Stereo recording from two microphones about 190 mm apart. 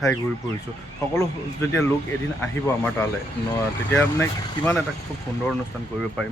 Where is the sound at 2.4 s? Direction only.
10° left (ahead or behind).